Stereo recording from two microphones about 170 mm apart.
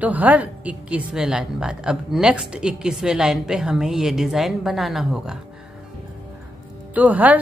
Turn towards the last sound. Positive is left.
turn(degrees=-10)  # may be behind; listen again after turning